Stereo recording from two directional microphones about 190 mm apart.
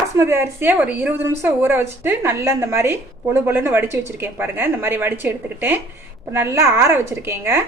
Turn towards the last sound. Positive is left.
turn(degrees=-15)  # may be behind; listen again after turning